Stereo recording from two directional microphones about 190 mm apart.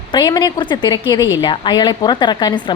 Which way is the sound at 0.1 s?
20° left (ahead or behind).